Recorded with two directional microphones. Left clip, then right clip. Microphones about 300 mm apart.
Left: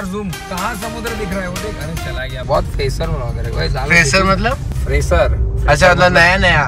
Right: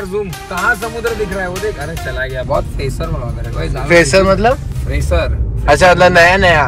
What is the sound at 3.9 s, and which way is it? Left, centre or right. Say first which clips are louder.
Speech: right 3 dB; centre.